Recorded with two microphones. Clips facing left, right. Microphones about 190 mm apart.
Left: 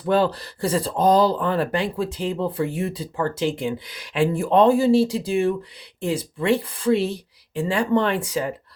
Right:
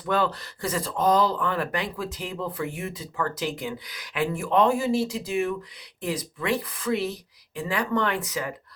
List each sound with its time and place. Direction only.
0.0 s speech: 30° left (ahead or behind)